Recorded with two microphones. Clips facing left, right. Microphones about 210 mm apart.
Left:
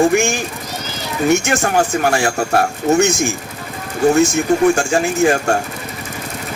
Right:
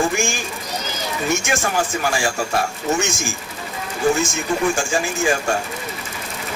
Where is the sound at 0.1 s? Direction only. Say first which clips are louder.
Left 7 dB; 65° left (ahead or behind).